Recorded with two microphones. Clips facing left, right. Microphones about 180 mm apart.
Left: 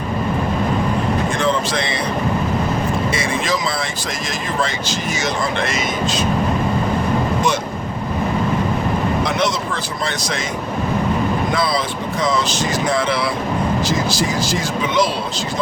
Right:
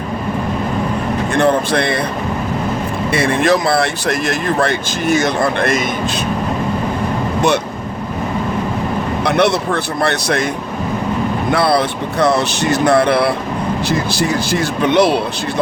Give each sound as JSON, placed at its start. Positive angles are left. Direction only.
{"t": 1.4, "sound": "a sound", "side_deg": -60}
{"t": 3.1, "sound": "speech", "side_deg": -60}
{"t": 9.2, "sound": "speech", "side_deg": -65}
{"t": 11.5, "sound": "speech", "side_deg": -65}